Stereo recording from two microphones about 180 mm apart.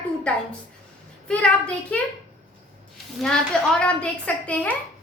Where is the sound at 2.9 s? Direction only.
5° left (ahead or behind).